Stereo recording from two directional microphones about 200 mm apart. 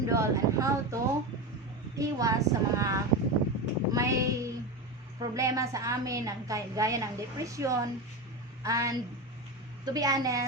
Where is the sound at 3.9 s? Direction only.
15° right (ahead or behind).